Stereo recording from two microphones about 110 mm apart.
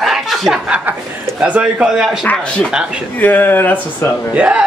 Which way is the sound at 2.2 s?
10° left (ahead or behind).